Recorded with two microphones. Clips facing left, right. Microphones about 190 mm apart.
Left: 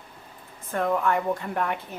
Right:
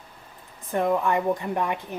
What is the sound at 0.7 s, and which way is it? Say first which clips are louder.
Speech: right 1 dB; 15° right (ahead or behind).